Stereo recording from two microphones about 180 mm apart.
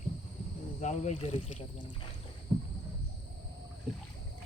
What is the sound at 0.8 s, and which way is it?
Speech, 40° left (ahead or behind).